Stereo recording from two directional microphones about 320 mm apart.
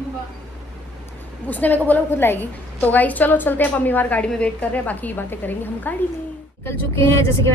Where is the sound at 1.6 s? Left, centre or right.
Centre.